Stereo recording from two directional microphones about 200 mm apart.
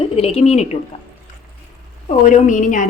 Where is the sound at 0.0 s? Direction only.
30° left (ahead or behind).